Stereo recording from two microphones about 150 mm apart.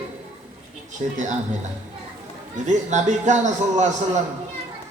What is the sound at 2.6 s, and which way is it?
A man's voice, 55° right (ahead or behind).